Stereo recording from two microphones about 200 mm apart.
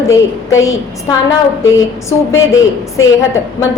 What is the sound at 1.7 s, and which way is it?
Speech, 15° left (ahead or behind).